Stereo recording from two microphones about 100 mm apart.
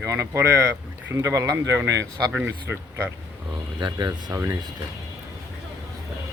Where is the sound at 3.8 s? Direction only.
40° right (ahead or behind).